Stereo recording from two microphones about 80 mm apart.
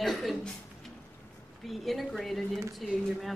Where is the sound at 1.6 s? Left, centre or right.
Centre.